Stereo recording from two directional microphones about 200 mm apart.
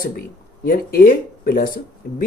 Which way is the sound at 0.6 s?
45° left (ahead or behind).